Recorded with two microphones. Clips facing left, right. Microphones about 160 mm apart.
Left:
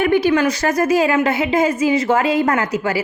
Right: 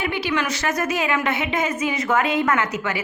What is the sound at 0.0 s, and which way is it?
A woman's voice, 45° left (ahead or behind).